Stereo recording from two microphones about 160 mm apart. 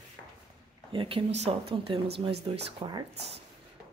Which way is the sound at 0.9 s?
35° right (ahead or behind).